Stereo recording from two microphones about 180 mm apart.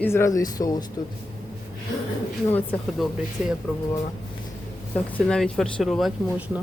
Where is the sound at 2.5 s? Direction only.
10° left (ahead or behind).